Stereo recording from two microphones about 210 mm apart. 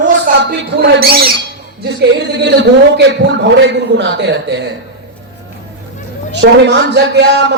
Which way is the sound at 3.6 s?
55° right (ahead or behind).